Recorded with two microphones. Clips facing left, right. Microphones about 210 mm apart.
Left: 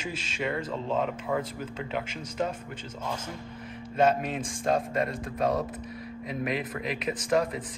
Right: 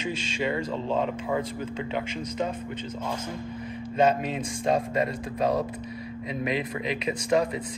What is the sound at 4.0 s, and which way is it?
A man's voice, centre (ahead or behind).